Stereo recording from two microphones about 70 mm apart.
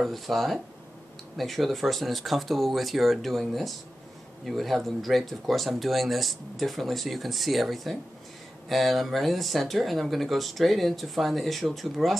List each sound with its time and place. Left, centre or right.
0.0 s speech: centre